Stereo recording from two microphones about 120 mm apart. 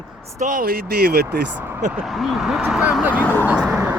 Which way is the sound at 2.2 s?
Centre (ahead or behind).